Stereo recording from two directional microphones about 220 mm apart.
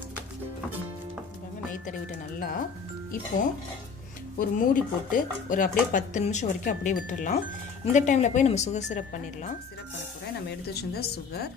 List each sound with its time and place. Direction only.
1.9 s speech: 40° left (ahead or behind)
4.4 s speech: 40° left (ahead or behind)
10.7 s a woman's voice: 45° left (ahead or behind)